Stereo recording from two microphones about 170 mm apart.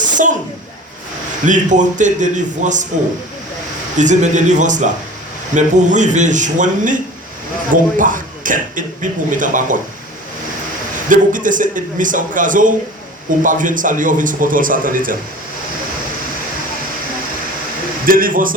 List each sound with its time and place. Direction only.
0.0 s a sound: 50° right (ahead or behind)
1.5 s a man's voice: 45° right (ahead or behind)
3.9 s a man's voice: 45° right (ahead or behind)
11.1 s a man's voice: 50° right (ahead or behind)
18.0 s speech: 55° right (ahead or behind)